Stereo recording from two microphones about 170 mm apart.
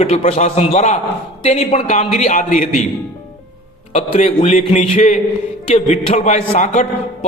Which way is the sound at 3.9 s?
40° left (ahead or behind).